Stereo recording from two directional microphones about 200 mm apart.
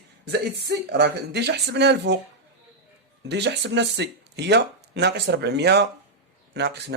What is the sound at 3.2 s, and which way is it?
Speech, 60° right (ahead or behind).